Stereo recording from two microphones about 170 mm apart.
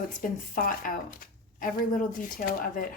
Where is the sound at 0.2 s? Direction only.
55° left (ahead or behind).